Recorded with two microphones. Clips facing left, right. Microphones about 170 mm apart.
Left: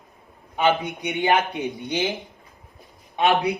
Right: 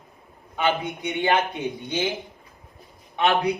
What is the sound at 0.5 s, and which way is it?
A man's voice, 15° left (ahead or behind).